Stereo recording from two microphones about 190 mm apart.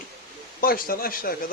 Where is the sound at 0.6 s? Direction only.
50° left (ahead or behind).